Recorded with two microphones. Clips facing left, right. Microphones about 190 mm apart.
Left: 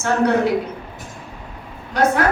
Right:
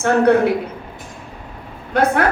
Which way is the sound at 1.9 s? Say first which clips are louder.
Right 1 dB; 55° right (ahead or behind).